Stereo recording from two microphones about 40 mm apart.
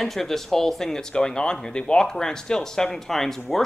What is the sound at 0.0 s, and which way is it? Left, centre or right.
Speech, centre.